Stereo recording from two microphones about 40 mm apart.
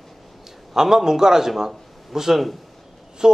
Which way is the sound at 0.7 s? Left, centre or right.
Centre.